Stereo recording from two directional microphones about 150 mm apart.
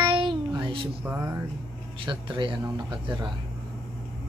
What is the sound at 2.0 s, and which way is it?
Speech, 35° right (ahead or behind).